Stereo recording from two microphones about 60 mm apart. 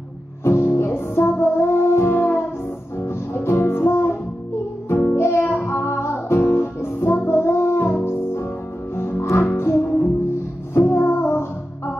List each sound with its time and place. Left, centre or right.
0.4 s music: left